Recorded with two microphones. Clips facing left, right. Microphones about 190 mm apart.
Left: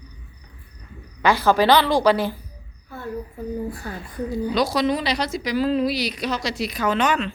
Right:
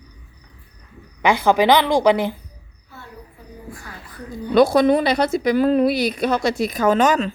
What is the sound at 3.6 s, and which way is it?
Speech, 35° left (ahead or behind).